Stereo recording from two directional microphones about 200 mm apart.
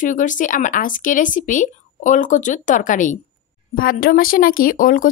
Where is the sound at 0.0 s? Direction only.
40° left (ahead or behind).